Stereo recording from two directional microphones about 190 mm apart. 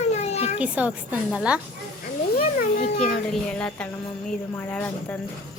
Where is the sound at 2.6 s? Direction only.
45° left (ahead or behind).